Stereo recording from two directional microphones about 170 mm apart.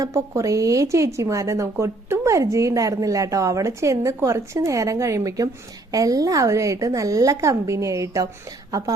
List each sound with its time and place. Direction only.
0.0 s a woman's voice: 20° right (ahead or behind)